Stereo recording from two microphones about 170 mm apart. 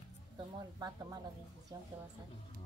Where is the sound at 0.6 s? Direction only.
25° right (ahead or behind).